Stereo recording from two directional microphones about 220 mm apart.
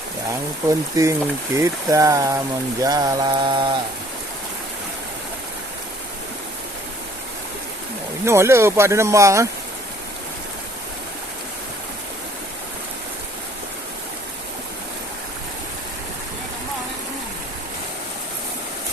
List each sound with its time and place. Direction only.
0.7 s speech: 15° right (ahead or behind)
2.8 s mantra: 15° right (ahead or behind)
8.2 s speech: 10° right (ahead or behind)